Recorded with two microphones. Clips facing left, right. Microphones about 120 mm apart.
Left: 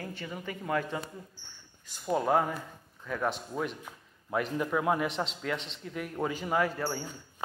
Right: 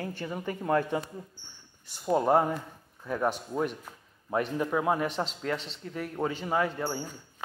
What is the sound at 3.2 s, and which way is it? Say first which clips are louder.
Speech: right 3 dB; 5° right (ahead or behind).